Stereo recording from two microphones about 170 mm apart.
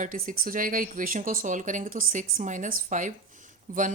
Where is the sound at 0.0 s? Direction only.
50° right (ahead or behind).